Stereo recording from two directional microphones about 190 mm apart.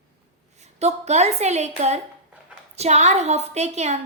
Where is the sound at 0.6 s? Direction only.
35° right (ahead or behind).